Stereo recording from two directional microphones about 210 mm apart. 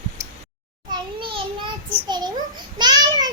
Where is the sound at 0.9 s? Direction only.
25° right (ahead or behind).